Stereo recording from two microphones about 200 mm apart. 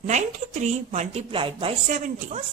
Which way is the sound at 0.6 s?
35° right (ahead or behind).